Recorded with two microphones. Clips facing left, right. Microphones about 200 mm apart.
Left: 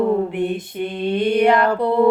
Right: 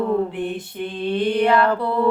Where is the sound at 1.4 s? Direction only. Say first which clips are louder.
Left 2 dB; 15° left (ahead or behind).